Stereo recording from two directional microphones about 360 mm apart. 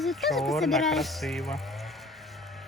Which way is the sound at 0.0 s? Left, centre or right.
Centre.